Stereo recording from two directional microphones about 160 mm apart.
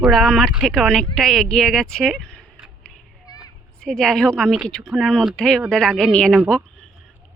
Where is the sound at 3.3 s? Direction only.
25° left (ahead or behind).